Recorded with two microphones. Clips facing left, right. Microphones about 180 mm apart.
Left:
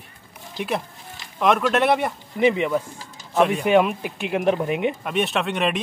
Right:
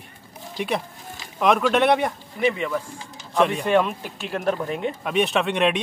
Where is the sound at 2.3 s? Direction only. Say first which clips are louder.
Left 5 dB; 20° left (ahead or behind).